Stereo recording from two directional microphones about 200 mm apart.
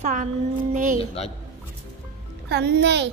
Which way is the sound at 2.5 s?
55° right (ahead or behind).